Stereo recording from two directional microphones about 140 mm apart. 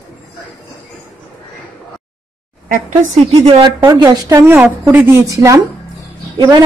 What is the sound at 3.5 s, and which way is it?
A woman's voice, 35° right (ahead or behind).